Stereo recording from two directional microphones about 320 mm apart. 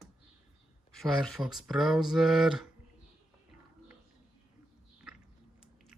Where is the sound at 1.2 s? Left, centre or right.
Centre.